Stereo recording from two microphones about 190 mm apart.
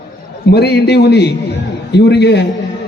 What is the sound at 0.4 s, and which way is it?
A man's voice, 60° left (ahead or behind).